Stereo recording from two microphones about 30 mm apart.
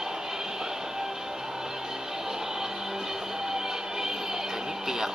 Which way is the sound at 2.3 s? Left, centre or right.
Centre.